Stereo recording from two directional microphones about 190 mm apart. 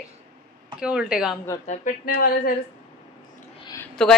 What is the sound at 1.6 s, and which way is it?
Speech, 40° left (ahead or behind).